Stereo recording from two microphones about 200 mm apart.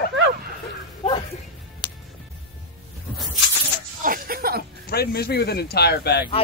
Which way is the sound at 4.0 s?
45° right (ahead or behind).